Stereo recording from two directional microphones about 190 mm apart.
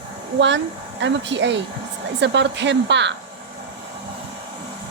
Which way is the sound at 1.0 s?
70° right (ahead or behind).